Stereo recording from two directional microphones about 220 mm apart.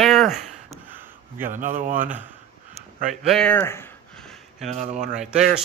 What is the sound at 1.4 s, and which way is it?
Speech, 35° right (ahead or behind).